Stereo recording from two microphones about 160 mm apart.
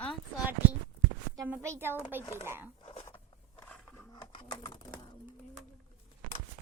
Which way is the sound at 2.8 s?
40° left (ahead or behind).